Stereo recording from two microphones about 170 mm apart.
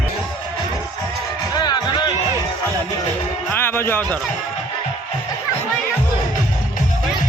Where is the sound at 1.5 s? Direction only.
25° left (ahead or behind).